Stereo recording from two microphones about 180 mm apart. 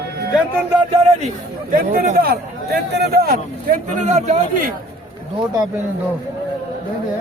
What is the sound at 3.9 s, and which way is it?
Speech, 40° right (ahead or behind).